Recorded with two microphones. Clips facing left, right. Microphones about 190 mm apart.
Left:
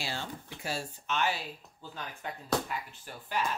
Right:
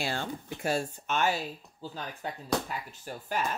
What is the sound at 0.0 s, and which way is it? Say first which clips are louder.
Speech: right 5 dB; 55° right (ahead or behind).